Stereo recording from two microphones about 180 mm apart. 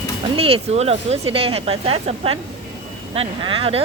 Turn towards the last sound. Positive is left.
turn(degrees=-30)  # may be behind; listen again after turning